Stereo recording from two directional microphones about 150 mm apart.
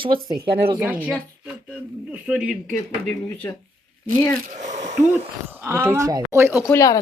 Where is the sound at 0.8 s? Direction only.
10° right (ahead or behind).